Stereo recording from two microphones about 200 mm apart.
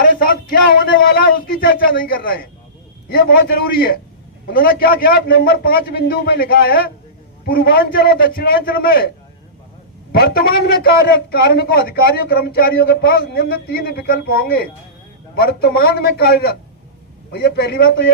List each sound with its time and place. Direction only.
0.1 s speech: 45° left (ahead or behind)
10.1 s speech: 50° left (ahead or behind)